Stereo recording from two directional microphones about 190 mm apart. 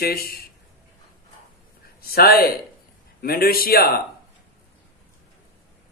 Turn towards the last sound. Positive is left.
turn(degrees=50)  # may be behind; listen again after turning